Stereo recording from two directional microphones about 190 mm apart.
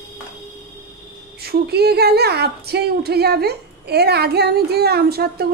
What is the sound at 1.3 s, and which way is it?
Speech, 55° right (ahead or behind).